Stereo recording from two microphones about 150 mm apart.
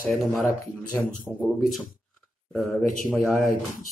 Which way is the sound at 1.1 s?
Centre (ahead or behind).